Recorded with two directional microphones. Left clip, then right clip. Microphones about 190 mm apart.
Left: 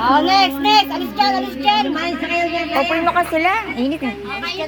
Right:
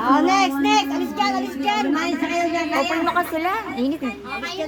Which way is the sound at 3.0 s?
Centre (ahead or behind).